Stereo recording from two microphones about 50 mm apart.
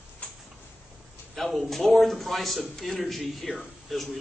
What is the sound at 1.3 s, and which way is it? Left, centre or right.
Speech, centre.